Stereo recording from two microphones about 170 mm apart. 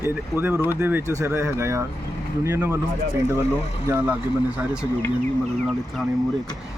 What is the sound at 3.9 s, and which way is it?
Speech, 10° right (ahead or behind).